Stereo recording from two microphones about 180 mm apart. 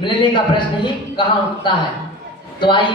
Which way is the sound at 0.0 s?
25° left (ahead or behind).